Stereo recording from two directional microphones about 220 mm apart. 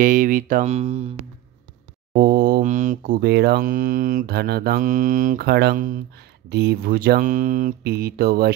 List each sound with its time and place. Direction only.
0.0 s mantra: 40° right (ahead or behind)
2.1 s mantra: 45° right (ahead or behind)
6.5 s speech: 45° right (ahead or behind)